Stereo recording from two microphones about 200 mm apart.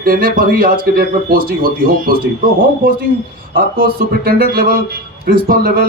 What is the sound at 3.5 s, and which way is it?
A man's voice, 45° right (ahead or behind).